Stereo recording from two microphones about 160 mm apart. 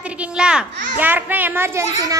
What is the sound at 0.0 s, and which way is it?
A child's voice, 5° right (ahead or behind).